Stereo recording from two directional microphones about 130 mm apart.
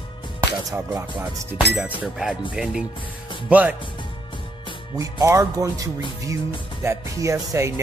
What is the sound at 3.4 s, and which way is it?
Speech, 10° right (ahead or behind).